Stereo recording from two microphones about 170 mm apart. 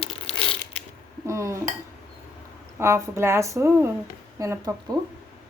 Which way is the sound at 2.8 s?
15° right (ahead or behind).